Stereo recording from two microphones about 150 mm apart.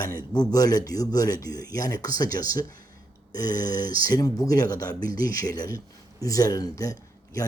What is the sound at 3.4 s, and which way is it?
Speech, 25° left (ahead or behind).